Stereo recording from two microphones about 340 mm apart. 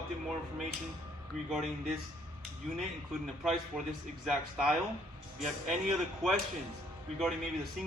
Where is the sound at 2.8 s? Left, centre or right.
Centre.